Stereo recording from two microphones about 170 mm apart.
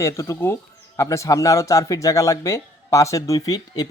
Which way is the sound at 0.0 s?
15° left (ahead or behind).